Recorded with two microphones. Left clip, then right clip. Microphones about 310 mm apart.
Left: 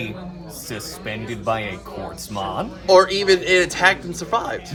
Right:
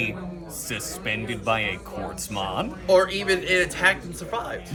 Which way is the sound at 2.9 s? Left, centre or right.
Centre.